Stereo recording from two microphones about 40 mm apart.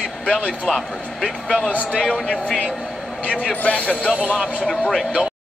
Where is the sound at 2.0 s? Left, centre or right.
Centre.